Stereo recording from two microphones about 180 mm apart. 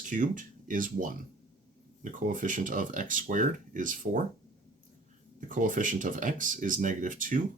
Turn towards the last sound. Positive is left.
turn(degrees=-45)  # may be behind; listen again after turning